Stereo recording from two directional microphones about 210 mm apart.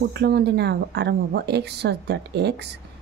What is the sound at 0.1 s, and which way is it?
A woman's voice, 50° right (ahead or behind).